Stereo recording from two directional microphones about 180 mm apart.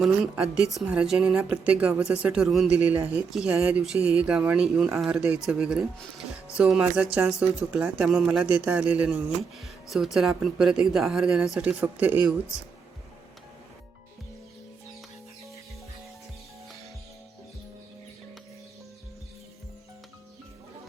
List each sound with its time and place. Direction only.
0.0 s speech: centre (ahead or behind)